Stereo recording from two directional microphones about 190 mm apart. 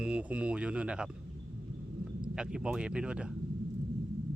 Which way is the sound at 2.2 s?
5° right (ahead or behind).